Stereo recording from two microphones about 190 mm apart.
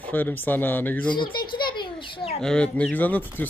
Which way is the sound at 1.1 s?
25° left (ahead or behind).